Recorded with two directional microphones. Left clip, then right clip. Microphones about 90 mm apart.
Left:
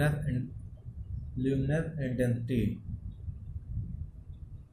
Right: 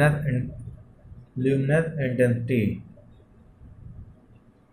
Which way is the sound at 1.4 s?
40° left (ahead or behind).